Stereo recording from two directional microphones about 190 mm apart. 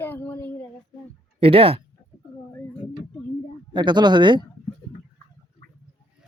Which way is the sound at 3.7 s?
25° right (ahead or behind).